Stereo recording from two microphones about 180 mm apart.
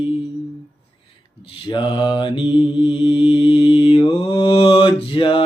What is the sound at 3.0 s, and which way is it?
Mantra, 25° left (ahead or behind).